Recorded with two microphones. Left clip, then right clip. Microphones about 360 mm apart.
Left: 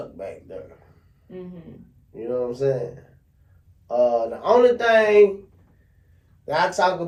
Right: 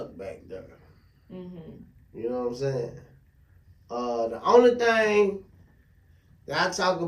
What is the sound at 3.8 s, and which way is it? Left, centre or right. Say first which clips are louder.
A man's voice: left 9 dB; centre.